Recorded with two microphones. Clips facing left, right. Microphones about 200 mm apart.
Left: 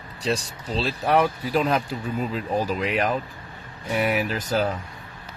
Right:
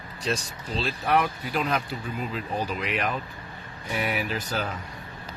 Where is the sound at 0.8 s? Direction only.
35° left (ahead or behind).